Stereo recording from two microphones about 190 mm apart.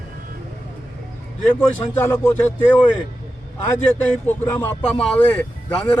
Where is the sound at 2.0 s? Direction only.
10° left (ahead or behind).